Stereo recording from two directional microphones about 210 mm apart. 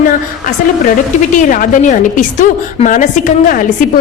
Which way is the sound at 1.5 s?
40° left (ahead or behind).